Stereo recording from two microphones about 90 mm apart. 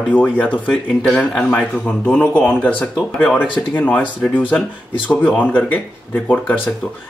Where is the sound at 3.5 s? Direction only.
20° left (ahead or behind).